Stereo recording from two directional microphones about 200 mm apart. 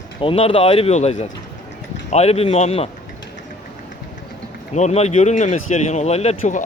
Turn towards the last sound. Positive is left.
turn(degrees=40)  # may be behind; listen again after turning